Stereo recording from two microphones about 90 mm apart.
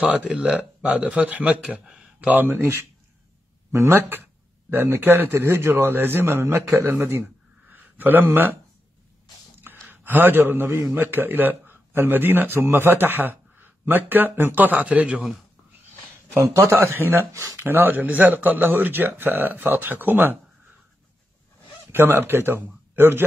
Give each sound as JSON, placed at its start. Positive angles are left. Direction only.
{"t": 0.0, "sound": "a man's voice", "side_deg": -15}
{"t": 7.7, "sound": "a sound", "side_deg": -20}
{"t": 9.8, "sound": "a man's voice", "side_deg": -20}
{"t": 16.3, "sound": "a man's voice", "side_deg": -35}
{"t": 16.7, "sound": "a man's voice", "side_deg": -25}
{"t": 21.9, "sound": "speech", "side_deg": -25}